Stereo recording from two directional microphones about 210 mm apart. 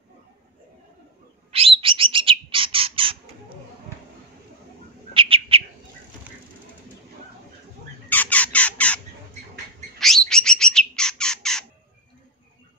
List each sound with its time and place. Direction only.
1.5 s bird: 25° right (ahead or behind)
5.1 s bird: 25° right (ahead or behind)
8.1 s squawk: 5° left (ahead or behind)
9.9 s bird: centre (ahead or behind)